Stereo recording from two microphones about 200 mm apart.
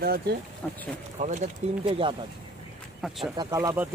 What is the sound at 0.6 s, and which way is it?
Speech, 10° left (ahead or behind).